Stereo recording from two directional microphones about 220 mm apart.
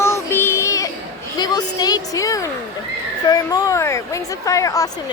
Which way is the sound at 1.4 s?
20° left (ahead or behind).